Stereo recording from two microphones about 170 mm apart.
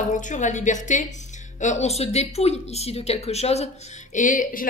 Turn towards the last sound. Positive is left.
turn(degrees=55)  # may be behind; listen again after turning